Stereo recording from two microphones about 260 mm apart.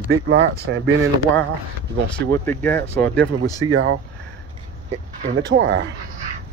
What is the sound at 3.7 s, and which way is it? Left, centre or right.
Speech, right.